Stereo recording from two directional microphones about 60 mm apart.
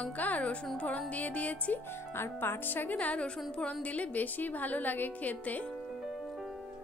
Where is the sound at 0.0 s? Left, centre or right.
Left.